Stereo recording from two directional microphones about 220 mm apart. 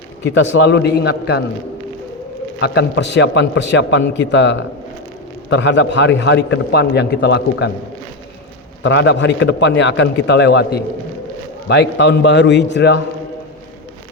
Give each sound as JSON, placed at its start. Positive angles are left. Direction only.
{"t": 0.3, "sound": "a man's voice", "side_deg": 55}
{"t": 2.6, "sound": "a man's voice", "side_deg": 50}
{"t": 8.8, "sound": "a man's voice", "side_deg": 55}